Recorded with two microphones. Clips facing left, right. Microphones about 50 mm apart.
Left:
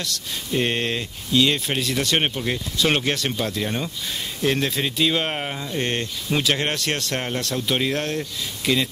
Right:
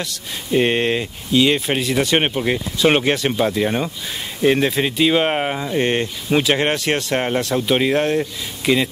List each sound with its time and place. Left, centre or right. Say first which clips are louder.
0.0 s speech: right 2 dB; centre